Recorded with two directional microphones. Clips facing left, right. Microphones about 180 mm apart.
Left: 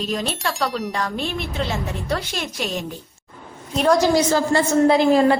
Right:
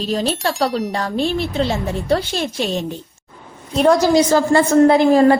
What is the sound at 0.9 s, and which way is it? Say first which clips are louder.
A woman's voice: right 6 dB; 30° right (ahead or behind).